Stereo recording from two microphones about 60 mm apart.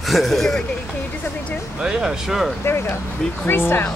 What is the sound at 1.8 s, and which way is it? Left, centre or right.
Speech, centre.